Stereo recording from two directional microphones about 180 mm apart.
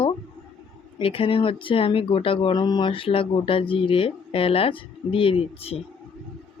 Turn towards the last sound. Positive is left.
turn(degrees=35)  # may be behind; listen again after turning